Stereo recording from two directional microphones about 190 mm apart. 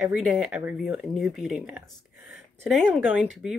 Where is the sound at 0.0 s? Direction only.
5° right (ahead or behind).